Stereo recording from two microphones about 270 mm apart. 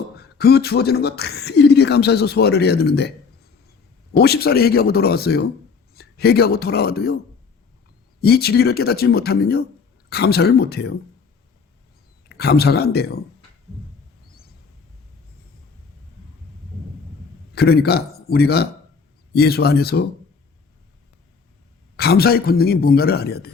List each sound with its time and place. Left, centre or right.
0.2 s speech: left
4.2 s speech: left
8.2 s speech: left
12.4 s speech: left
17.5 s a man's voice: left
21.9 s speech: left